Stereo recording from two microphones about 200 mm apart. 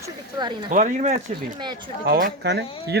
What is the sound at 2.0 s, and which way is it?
Speech, 50° right (ahead or behind).